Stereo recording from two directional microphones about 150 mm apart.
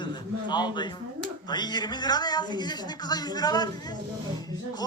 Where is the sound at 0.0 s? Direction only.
30° left (ahead or behind).